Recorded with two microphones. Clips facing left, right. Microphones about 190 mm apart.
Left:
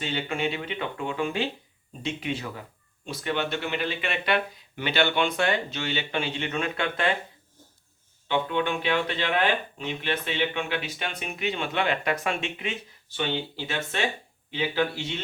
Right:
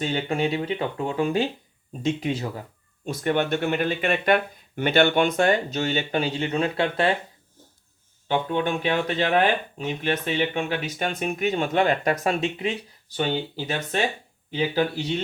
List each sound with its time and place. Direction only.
0.0 s speech: 45° right (ahead or behind)
8.3 s speech: 40° right (ahead or behind)